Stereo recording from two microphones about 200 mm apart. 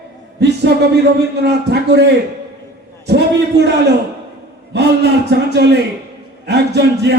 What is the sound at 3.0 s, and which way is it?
Speech, 55° right (ahead or behind).